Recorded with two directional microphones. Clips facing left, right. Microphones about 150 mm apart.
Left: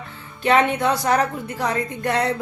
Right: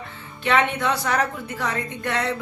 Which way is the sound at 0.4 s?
40° left (ahead or behind).